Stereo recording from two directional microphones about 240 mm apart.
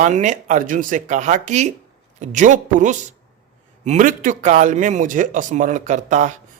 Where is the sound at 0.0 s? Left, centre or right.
Right.